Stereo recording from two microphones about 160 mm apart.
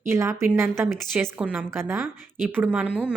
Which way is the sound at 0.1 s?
15° right (ahead or behind).